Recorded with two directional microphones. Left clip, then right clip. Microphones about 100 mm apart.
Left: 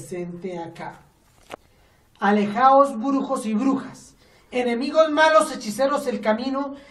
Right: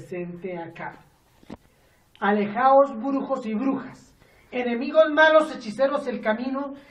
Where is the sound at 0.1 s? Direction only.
15° left (ahead or behind).